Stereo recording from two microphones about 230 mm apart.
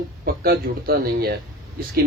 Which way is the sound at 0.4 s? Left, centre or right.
Right.